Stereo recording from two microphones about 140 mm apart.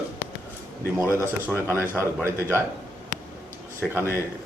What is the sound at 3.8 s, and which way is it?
Speech, 5° left (ahead or behind).